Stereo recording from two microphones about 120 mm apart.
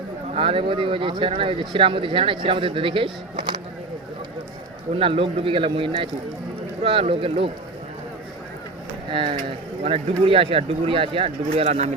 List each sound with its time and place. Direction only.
0.3 s speech: 45° right (ahead or behind)
4.9 s speech: 50° right (ahead or behind)
9.1 s speech: 45° right (ahead or behind)
11.5 s speech: 70° right (ahead or behind)